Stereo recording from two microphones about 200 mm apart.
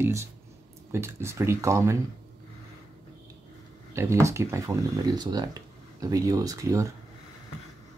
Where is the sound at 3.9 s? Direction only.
15° right (ahead or behind).